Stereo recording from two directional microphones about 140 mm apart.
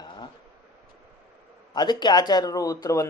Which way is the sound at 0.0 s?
35° left (ahead or behind).